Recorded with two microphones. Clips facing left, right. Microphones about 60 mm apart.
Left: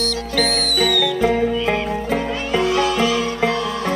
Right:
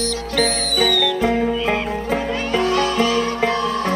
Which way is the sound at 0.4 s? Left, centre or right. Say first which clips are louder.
Even; right.